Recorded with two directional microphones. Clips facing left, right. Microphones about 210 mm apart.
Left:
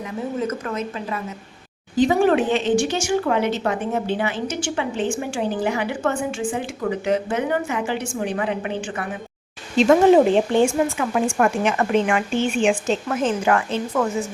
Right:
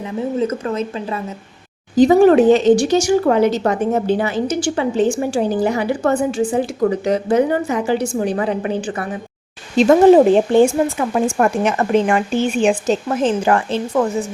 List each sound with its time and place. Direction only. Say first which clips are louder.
0.3 s speech: right 5 dB; 30° right (ahead or behind)